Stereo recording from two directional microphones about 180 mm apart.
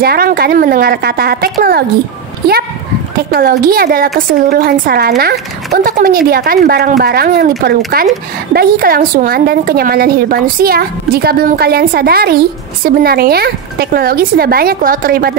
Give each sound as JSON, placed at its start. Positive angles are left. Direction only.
{"t": 0.0, "sound": "a woman's voice", "side_deg": -55}
{"t": 3.3, "sound": "a woman's voice", "side_deg": -60}